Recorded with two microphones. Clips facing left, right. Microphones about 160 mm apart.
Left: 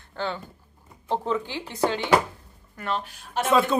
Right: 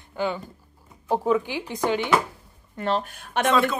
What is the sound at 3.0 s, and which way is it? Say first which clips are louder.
Speech: right 3 dB; 55° right (ahead or behind).